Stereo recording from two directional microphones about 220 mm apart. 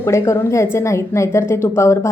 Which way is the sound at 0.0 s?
15° left (ahead or behind).